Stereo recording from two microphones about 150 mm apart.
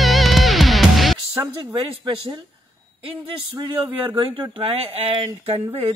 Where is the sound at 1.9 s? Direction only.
35° right (ahead or behind).